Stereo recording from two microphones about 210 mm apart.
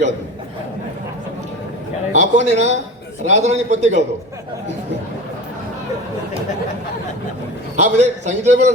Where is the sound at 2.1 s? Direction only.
35° right (ahead or behind).